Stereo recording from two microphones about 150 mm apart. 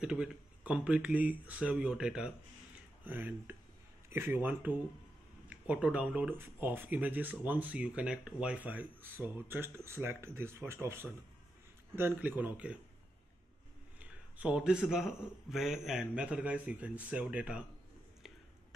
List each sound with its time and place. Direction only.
0.0 s speech: 5° right (ahead or behind)
14.0 s speech: 5° right (ahead or behind)